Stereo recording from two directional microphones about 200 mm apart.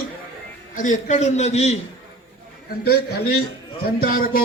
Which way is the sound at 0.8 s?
40° left (ahead or behind).